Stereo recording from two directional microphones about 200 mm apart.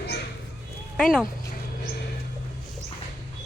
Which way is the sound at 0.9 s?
5° left (ahead or behind).